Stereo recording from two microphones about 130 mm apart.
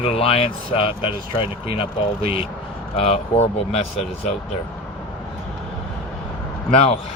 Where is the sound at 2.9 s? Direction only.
50° left (ahead or behind).